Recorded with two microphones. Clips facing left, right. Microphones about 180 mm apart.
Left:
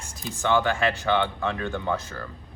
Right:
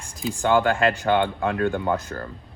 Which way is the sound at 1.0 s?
45° right (ahead or behind).